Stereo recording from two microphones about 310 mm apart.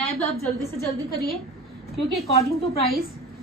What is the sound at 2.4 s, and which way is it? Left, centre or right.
Speech, centre.